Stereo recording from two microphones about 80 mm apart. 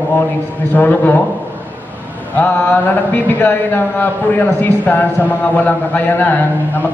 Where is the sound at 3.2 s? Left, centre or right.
Left.